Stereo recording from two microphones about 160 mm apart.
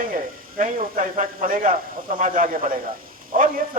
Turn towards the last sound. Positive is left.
turn(degrees=-55)  # may be behind; listen again after turning